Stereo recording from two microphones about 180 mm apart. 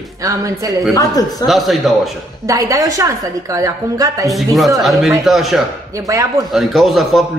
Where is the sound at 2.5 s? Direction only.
20° right (ahead or behind).